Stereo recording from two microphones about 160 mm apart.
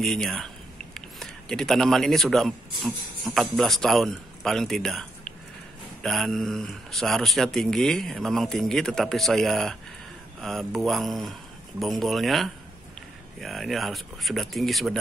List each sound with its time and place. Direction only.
0.0 s a man's voice: 5° left (ahead or behind)